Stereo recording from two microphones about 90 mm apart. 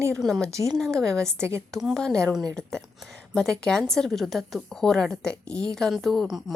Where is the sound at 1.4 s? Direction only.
30° right (ahead or behind).